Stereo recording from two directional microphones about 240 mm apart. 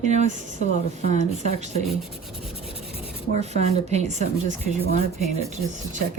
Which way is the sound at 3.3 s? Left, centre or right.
Right.